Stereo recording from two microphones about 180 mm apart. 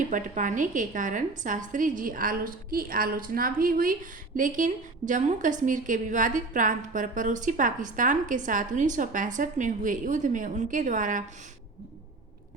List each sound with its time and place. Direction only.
0.1 s a woman's voice: 45° right (ahead or behind)